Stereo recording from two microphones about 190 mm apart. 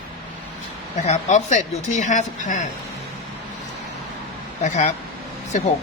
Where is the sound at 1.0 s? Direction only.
35° left (ahead or behind).